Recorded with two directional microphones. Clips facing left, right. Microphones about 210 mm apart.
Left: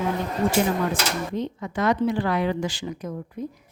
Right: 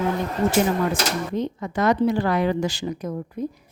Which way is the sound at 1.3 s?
40° right (ahead or behind).